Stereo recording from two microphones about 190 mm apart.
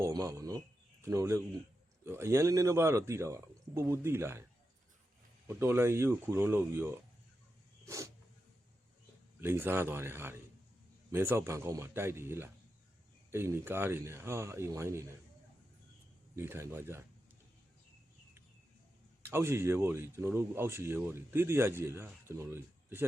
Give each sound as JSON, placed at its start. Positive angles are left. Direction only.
{"t": 0.0, "sound": "speech", "side_deg": -20}
{"t": 5.5, "sound": "speech", "side_deg": -10}
{"t": 7.9, "sound": "a sound", "side_deg": -15}
{"t": 9.4, "sound": "speech", "side_deg": -10}
{"t": 16.3, "sound": "speech", "side_deg": -15}
{"t": 19.2, "sound": "speech", "side_deg": -15}